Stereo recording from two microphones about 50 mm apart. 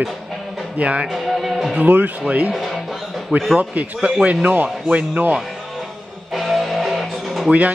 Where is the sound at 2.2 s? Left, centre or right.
Right.